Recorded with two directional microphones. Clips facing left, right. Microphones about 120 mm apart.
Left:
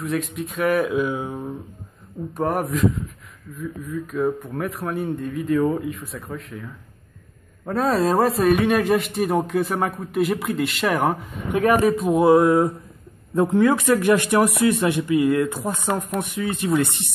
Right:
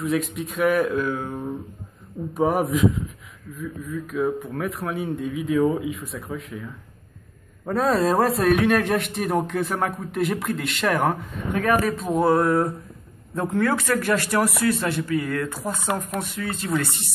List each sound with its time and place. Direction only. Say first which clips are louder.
0.0 s a man's voice: right 1 dB; centre (ahead or behind)
1.0 s speech: left 1 dB; 15° left (ahead or behind)
2.3 s a man's voice: right 2 dB; 5° right (ahead or behind)
7.6 s a man's voice: even; centre (ahead or behind)
11.5 s speech: left 4 dB; 15° left (ahead or behind)